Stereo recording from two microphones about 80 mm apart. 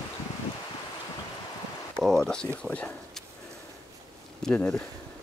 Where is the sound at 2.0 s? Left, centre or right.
Centre.